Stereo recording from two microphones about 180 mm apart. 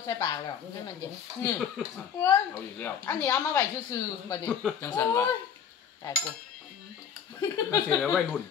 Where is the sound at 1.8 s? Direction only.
Centre (ahead or behind).